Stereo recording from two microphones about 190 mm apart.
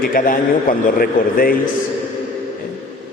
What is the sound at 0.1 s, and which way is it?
A man's voice, 50° left (ahead or behind).